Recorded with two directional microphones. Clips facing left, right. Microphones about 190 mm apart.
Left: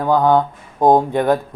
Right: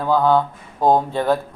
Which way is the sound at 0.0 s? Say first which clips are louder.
Left 2 dB; 15° left (ahead or behind).